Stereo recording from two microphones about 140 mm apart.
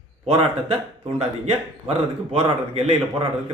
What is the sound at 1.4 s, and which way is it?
Speech, 45° right (ahead or behind).